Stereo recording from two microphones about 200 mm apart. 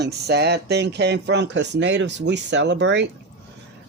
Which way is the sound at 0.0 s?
55° right (ahead or behind).